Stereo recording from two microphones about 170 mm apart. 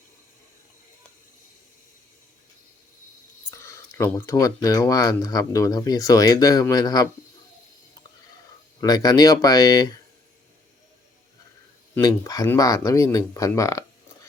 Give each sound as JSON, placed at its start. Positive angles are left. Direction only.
{"t": 3.5, "sound": "speech", "side_deg": 15}
{"t": 8.8, "sound": "speech", "side_deg": 20}
{"t": 11.9, "sound": "speech", "side_deg": 20}